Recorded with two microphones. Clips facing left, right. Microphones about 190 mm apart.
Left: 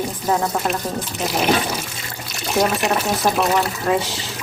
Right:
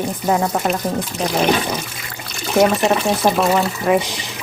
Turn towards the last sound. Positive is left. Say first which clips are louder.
# right 3 dB
turn(degrees=-10)  # may be behind; listen again after turning